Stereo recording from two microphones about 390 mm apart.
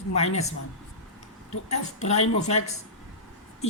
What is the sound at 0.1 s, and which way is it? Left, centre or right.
Speech, centre.